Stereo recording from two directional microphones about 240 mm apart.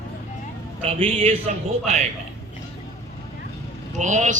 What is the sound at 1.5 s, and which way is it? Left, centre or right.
Speech, right.